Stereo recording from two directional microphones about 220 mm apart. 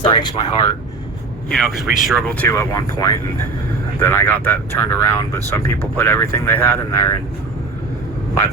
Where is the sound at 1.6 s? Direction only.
Centre (ahead or behind).